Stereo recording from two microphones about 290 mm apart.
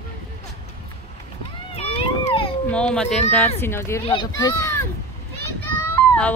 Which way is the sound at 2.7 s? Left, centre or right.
Centre.